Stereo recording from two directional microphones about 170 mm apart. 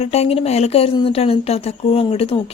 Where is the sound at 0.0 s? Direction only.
35° left (ahead or behind).